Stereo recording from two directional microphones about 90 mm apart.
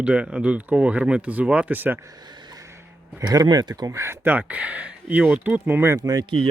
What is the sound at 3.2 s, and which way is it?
Speech, 50° right (ahead or behind).